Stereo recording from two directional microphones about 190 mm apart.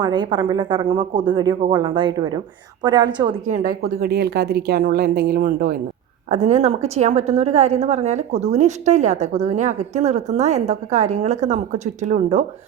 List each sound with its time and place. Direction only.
0.0 s speech: 25° right (ahead or behind)
3.5 s a woman's voice: 50° right (ahead or behind)